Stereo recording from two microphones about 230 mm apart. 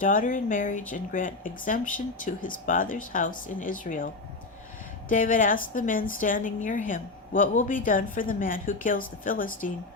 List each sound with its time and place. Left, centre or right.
0.0 s a woman's voice: left